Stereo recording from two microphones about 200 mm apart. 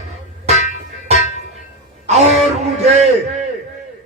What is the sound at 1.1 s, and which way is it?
Music, 35° right (ahead or behind).